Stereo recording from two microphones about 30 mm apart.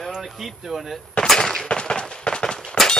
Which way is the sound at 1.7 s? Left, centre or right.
Left.